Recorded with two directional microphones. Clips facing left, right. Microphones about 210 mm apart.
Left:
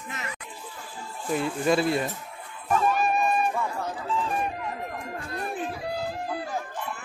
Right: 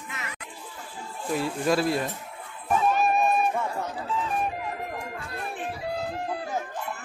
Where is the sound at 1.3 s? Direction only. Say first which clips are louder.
Left 1 dB; centre (ahead or behind).